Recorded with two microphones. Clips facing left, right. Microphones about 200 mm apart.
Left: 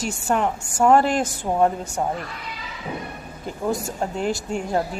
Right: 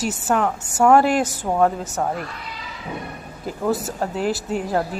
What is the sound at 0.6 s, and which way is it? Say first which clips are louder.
Speech: right 2 dB; 5° right (ahead or behind).